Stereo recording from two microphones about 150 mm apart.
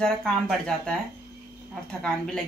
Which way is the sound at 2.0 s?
5° left (ahead or behind).